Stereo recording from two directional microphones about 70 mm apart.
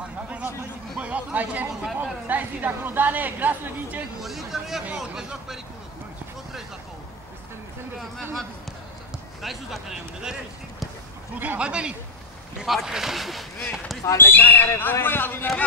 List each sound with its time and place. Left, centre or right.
0.9 s a woman's voice: centre
4.2 s speech: centre
9.4 s speech: centre
11.3 s speech: right; by 13.9 s centre
14.0 s a man's voice: left